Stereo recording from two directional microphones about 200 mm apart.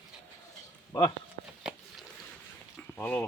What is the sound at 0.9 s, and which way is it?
Speech, 15° left (ahead or behind).